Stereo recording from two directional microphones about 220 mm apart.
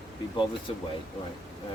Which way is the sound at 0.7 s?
25° left (ahead or behind).